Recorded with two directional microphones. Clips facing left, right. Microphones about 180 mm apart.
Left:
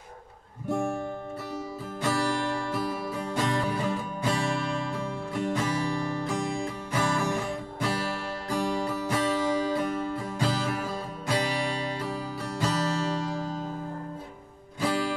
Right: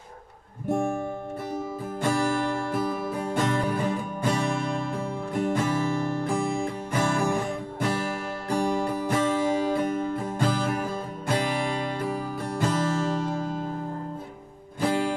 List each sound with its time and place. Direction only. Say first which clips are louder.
0.7 s music: right 3 dB; 55° right (ahead or behind)
8.5 s music: right 3 dB; 50° right (ahead or behind)
14.8 s music: right 3 dB; 50° right (ahead or behind)